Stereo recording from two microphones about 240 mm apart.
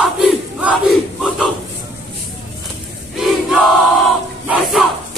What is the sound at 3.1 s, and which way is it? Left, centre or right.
Crowd, centre.